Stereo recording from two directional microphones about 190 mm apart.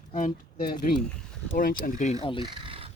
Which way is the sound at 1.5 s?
45° left (ahead or behind).